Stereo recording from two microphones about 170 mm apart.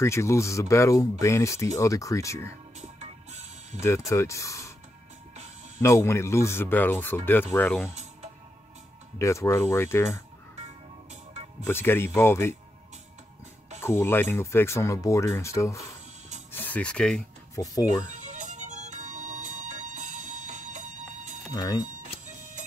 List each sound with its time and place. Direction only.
0.0 s speech: 15° left (ahead or behind)
2.8 s music: 40° right (ahead or behind)
3.8 s speech: 15° left (ahead or behind)
5.8 s speech: 15° left (ahead or behind)
7.9 s music: 40° right (ahead or behind)
9.2 s speech: 15° left (ahead or behind)
11.6 s speech: 10° left (ahead or behind)
13.7 s speech: 15° left (ahead or behind)
17.6 s speech: 20° left (ahead or behind)
18.1 s music: 45° right (ahead or behind)
21.5 s speech: 20° left (ahead or behind)